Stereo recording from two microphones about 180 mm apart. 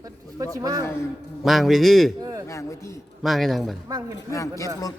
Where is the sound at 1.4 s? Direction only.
Centre (ahead or behind).